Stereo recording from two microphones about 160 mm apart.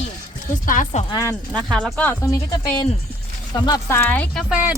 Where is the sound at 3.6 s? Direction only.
20° left (ahead or behind).